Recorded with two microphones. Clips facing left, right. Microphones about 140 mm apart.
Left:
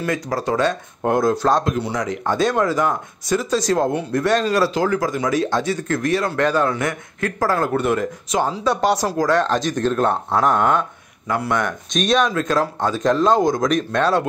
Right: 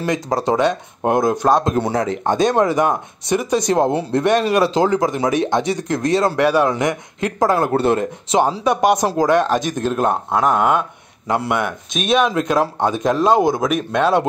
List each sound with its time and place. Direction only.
0.0 s speech: 25° right (ahead or behind); by 10.9 s 10° right (ahead or behind)
11.2 s speech: 20° right (ahead or behind)
11.5 s speech: 5° right (ahead or behind)